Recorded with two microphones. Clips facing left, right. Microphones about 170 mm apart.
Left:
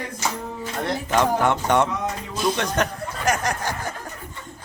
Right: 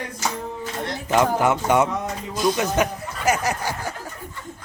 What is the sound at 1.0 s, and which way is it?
Speech, 10° right (ahead or behind).